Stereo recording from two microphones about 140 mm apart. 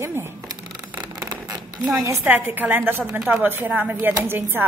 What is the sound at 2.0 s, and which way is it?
A woman's voice, 15° right (ahead or behind).